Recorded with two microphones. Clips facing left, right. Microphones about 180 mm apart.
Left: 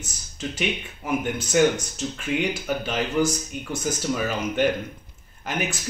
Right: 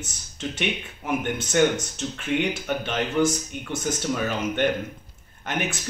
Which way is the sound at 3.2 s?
25° right (ahead or behind).